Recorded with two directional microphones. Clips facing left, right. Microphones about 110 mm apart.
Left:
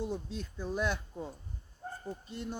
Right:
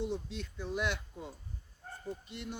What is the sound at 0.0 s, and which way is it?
Speech, 40° left (ahead or behind).